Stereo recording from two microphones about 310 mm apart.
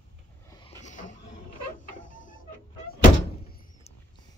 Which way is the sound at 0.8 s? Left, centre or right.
Left.